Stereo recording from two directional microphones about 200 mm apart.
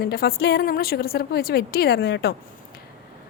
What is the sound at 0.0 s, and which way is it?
A woman's voice, 50° left (ahead or behind).